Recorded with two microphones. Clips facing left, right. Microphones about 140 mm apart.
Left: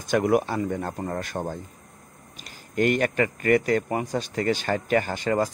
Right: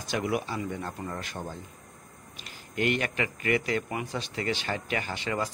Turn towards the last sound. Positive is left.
turn(degrees=45)  # may be behind; listen again after turning